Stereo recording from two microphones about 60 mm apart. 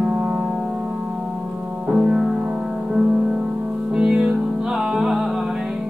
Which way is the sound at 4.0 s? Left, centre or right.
Centre.